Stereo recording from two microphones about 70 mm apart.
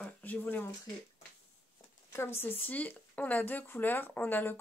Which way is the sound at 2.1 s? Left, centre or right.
Left.